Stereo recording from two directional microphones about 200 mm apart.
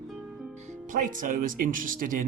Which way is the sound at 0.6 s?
40° right (ahead or behind).